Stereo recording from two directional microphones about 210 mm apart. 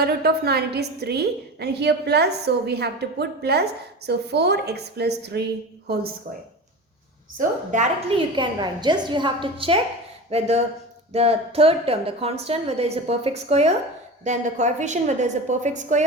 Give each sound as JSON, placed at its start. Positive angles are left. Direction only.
{"t": 0.0, "sound": "a woman's voice", "side_deg": -50}
{"t": 7.3, "sound": "a woman's voice", "side_deg": -35}
{"t": 8.1, "sound": "a woman's voice", "side_deg": -20}